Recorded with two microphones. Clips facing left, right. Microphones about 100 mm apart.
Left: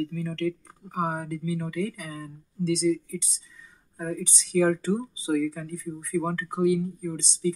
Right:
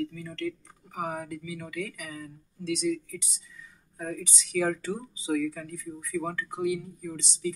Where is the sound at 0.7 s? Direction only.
35° left (ahead or behind).